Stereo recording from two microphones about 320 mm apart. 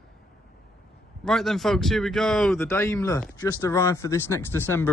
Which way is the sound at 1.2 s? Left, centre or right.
Centre.